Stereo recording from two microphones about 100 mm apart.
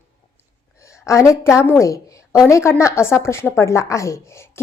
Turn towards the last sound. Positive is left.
turn(degrees=30)  # may be behind; listen again after turning